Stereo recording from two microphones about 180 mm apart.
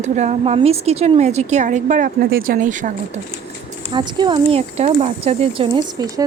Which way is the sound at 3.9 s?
25° right (ahead or behind).